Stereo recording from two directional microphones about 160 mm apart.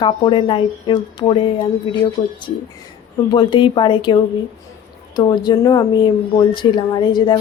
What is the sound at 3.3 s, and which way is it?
Speech, 30° left (ahead or behind).